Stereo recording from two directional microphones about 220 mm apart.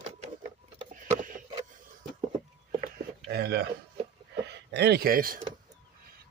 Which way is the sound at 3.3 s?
45° right (ahead or behind).